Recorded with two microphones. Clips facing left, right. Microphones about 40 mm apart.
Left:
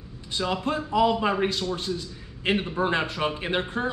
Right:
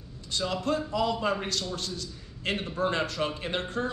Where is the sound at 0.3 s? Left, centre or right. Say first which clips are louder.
Left 2 dB; left.